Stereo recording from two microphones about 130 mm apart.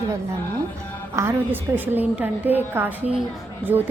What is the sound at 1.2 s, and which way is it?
A woman's voice, 15° right (ahead or behind).